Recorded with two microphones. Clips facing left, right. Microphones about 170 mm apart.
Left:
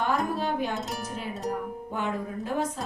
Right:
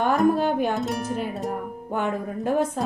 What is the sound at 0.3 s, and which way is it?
Speech, 55° right (ahead or behind).